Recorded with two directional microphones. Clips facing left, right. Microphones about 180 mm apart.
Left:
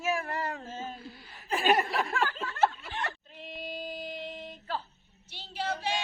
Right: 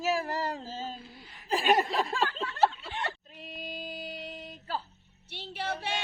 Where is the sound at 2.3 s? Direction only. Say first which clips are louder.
Right 1 dB; 30° right (ahead or behind).